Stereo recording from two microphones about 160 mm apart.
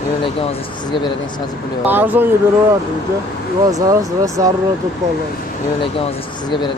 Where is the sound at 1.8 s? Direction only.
10° right (ahead or behind).